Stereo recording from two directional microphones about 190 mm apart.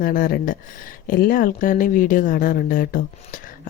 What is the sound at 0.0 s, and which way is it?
A woman's voice, 50° left (ahead or behind).